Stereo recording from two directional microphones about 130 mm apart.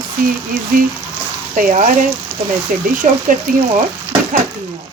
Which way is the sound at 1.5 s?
90° right.